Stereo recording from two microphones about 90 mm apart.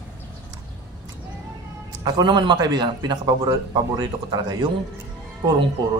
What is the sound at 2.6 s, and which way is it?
A man's voice, 50° right (ahead or behind).